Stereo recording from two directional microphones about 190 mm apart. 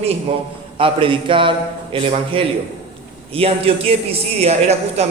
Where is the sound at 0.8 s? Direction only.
25° right (ahead or behind).